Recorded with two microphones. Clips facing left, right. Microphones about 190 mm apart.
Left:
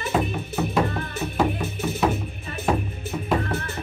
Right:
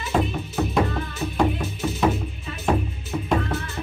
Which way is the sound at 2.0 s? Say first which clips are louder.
Right 1 dB; centre (ahead or behind).